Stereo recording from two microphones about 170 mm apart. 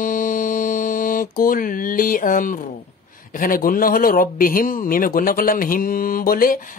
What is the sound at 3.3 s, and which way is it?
A man's voice, 55° left (ahead or behind).